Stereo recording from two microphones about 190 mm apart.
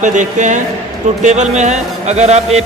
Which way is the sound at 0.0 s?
40° right (ahead or behind).